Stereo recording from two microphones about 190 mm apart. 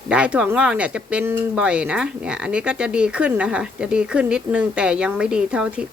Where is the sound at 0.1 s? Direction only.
5° right (ahead or behind).